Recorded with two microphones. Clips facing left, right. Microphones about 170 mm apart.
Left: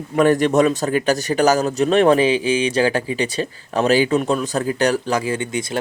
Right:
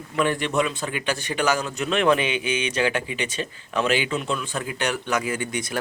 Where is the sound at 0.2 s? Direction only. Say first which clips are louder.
Left 8 dB; 45° left (ahead or behind).